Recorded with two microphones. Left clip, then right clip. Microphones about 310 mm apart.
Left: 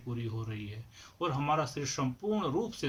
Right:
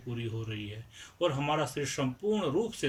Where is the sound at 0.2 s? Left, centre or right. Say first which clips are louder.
Right 3 dB; centre.